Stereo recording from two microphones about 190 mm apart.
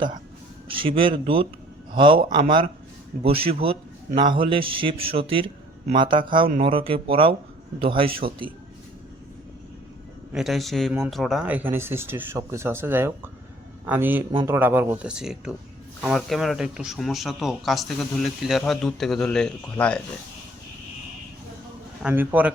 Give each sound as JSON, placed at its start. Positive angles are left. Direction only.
{"t": 0.7, "sound": "a man's voice", "side_deg": -25}
{"t": 10.3, "sound": "speech", "side_deg": 0}
{"t": 22.0, "sound": "speech", "side_deg": -10}